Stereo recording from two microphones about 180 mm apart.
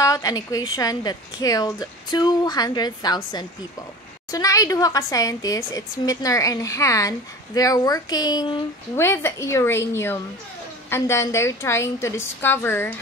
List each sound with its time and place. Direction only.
0.0 s a woman's voice: 20° left (ahead or behind)
8.9 s a woman's voice: 15° left (ahead or behind)